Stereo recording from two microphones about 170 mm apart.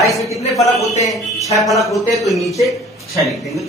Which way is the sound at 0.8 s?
40° left (ahead or behind).